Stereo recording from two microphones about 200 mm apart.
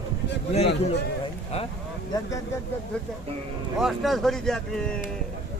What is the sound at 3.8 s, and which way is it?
Speech, centre (ahead or behind).